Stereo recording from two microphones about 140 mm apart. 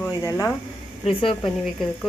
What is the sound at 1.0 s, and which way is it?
Speech, 40° left (ahead or behind).